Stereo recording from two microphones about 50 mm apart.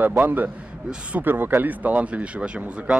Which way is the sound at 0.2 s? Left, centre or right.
Right.